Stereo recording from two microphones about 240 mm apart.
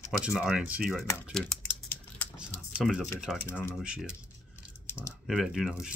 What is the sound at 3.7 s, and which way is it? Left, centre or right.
Speech, centre.